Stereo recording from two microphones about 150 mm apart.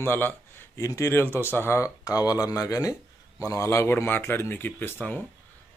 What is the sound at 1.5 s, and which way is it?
Speech, 15° left (ahead or behind).